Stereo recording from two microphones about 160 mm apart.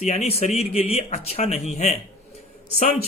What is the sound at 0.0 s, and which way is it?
Speech, 45° left (ahead or behind).